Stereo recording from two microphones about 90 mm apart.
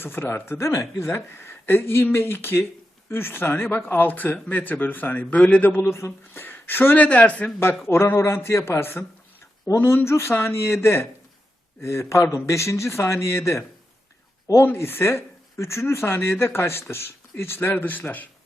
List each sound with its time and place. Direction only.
0.0 s a man's voice: 25° left (ahead or behind)